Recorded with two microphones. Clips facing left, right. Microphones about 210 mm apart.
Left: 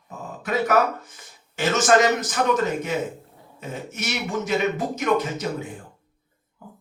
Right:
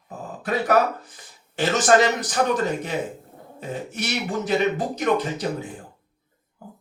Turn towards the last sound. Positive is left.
turn(degrees=-35)  # may be behind; listen again after turning